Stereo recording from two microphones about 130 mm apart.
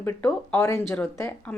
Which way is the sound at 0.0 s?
15° left (ahead or behind).